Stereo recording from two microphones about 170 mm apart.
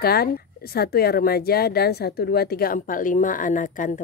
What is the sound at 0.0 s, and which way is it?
A woman's voice, 65° left (ahead or behind).